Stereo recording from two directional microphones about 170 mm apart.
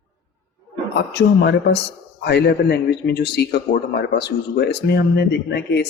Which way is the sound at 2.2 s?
75° left (ahead or behind).